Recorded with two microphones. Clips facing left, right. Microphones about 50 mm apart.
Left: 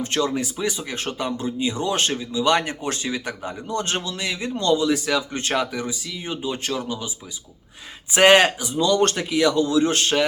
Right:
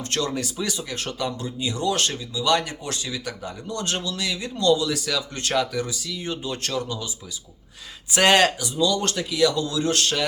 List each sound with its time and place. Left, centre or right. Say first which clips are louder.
0.0 s speech: left 3 dB; centre
8.1 s speech: left 3 dB; left
8.8 s speech: left 4 dB; left